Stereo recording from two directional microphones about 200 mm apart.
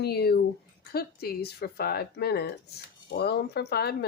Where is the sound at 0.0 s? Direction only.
55° left (ahead or behind).